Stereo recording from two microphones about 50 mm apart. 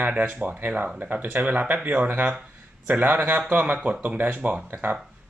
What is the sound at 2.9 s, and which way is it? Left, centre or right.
Speech, right.